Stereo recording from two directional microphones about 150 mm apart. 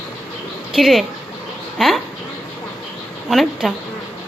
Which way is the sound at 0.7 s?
Centre (ahead or behind).